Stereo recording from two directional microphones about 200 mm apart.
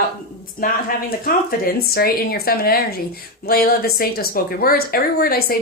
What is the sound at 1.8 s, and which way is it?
Speech, 50° left (ahead or behind).